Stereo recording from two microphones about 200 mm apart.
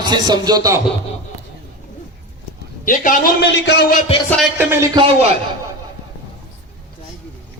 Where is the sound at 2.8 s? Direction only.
40° left (ahead or behind).